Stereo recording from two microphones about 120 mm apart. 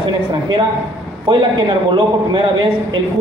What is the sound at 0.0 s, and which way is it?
A woman's voice, 40° right (ahead or behind).